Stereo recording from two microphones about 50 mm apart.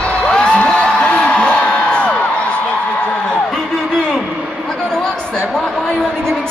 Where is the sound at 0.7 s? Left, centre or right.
Centre.